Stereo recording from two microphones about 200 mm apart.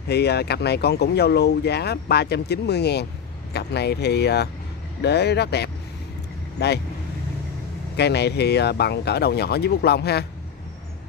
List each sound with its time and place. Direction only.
0.1 s speech: 55° left (ahead or behind)
7.9 s speech: 55° left (ahead or behind)